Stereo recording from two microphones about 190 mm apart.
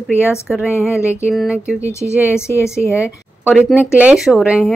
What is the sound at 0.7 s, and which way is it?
Speech, 15° left (ahead or behind).